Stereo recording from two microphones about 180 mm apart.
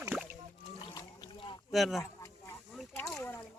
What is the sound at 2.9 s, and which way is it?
Rowboat, 15° left (ahead or behind).